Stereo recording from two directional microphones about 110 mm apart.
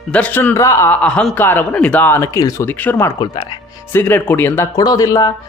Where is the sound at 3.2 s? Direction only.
40° left (ahead or behind).